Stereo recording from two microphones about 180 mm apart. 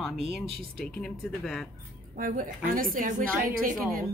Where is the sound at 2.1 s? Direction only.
50° right (ahead or behind).